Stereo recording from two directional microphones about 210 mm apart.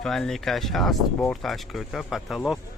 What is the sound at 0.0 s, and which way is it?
Speech, centre (ahead or behind).